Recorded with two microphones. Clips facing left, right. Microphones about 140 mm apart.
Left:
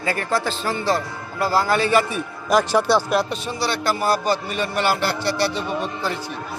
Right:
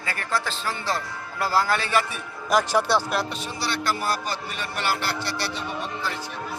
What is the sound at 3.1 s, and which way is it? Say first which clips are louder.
Speech: left 6 dB; 15° left (ahead or behind).